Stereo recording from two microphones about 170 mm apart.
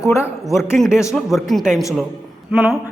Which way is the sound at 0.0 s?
15° left (ahead or behind).